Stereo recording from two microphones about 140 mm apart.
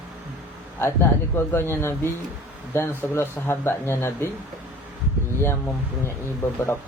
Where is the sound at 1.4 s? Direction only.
15° left (ahead or behind).